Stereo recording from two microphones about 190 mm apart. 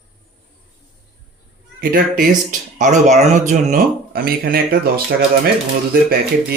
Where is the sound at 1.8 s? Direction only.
50° right (ahead or behind).